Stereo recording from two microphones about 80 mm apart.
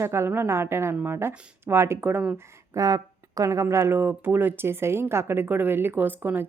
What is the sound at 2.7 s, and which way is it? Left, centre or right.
Speech, right.